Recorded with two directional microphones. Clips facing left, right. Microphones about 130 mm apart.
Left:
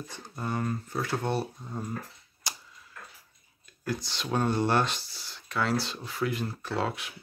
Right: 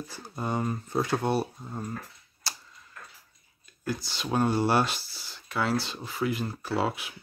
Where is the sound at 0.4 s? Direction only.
20° right (ahead or behind).